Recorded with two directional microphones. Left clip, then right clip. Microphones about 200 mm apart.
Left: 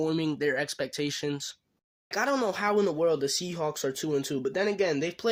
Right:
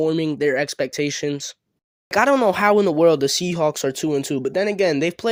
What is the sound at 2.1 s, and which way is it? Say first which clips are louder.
Speech: right 11 dB; 45° right (ahead or behind).